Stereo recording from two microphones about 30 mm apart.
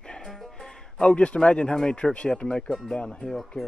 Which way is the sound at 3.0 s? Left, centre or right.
Left.